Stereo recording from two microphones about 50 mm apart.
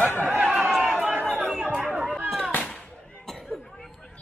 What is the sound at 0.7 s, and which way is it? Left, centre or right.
Chatter, centre.